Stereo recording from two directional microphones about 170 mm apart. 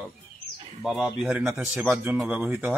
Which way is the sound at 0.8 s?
5° right (ahead or behind).